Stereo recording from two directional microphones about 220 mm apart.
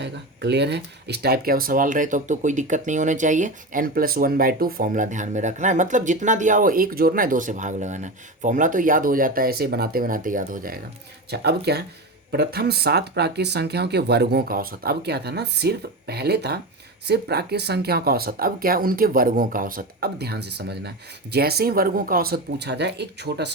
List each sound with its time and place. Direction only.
0.0 s speech: 50° right (ahead or behind)